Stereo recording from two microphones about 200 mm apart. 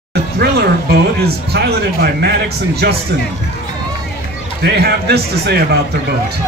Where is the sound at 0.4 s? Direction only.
50° right (ahead or behind).